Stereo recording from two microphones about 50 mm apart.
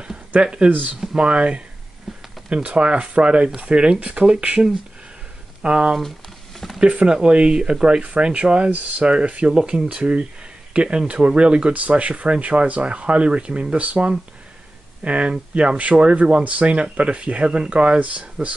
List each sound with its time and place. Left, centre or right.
0.3 s speech: centre
0.7 s speech: right
1.1 s speech: right
2.1 s a sound: centre
2.5 s speech: right